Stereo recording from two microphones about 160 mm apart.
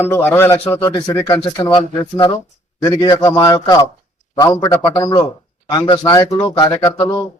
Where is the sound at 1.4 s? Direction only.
25° left (ahead or behind).